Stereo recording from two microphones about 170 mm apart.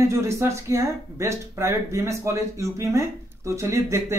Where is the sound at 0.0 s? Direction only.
15° right (ahead or behind).